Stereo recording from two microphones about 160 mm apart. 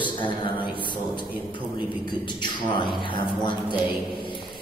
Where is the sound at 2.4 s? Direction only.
30° left (ahead or behind).